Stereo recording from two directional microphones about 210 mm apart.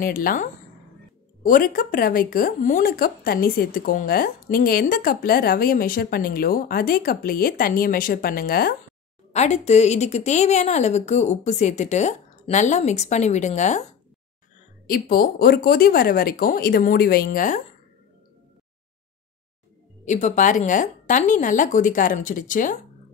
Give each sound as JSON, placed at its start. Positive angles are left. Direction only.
{"t": 0.0, "sound": "speech", "side_deg": 40}
{"t": 9.3, "sound": "a woman's voice", "side_deg": 30}
{"t": 14.9, "sound": "speech", "side_deg": 45}
{"t": 20.1, "sound": "a woman's voice", "side_deg": 35}